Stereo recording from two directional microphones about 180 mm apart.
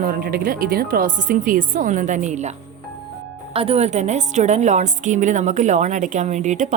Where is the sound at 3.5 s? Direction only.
35° right (ahead or behind).